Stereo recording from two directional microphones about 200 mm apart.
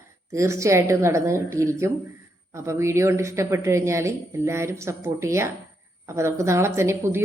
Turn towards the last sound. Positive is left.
turn(degrees=-15)  # may be behind; listen again after turning